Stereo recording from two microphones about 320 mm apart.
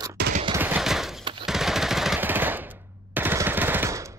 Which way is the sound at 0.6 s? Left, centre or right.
Centre.